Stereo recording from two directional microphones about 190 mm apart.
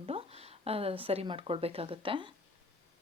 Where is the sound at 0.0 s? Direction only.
30° right (ahead or behind).